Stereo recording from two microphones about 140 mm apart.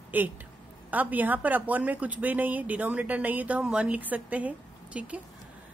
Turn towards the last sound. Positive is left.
turn(degrees=-10)  # may be behind; listen again after turning